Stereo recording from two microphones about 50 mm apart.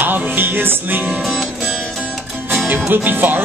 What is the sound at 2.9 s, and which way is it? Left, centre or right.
Music, right.